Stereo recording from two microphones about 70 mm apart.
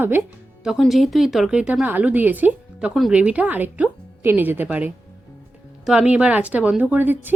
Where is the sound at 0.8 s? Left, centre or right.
Centre.